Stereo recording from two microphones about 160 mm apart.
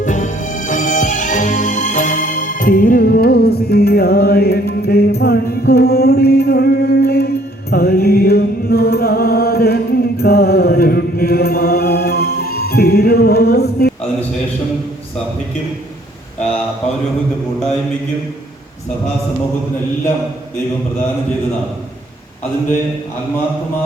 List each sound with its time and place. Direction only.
0.0 s music: 50° left (ahead or behind); by 13.9 s 85° left